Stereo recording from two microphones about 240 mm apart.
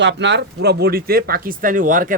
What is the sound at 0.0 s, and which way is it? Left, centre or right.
Speech, right.